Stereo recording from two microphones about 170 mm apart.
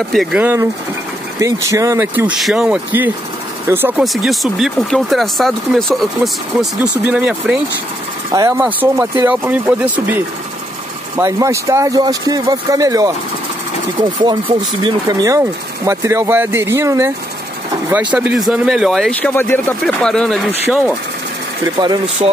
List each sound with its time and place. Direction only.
0.1 s speech: centre (ahead or behind)
1.4 s speech: 20° right (ahead or behind)
4.0 s speech: centre (ahead or behind)
8.3 s speech: 20° right (ahead or behind)
14.1 s speech: 25° right (ahead or behind); by 20.4 s 5° left (ahead or behind)
21.7 s speech: 25° right (ahead or behind)